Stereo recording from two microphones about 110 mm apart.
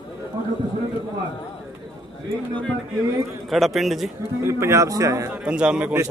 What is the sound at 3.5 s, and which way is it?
Speech, centre (ahead or behind).